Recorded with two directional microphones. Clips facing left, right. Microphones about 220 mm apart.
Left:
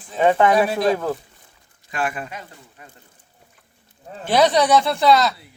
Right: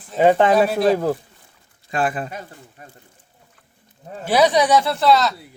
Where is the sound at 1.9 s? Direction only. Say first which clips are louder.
Right 4 dB; 30° right (ahead or behind).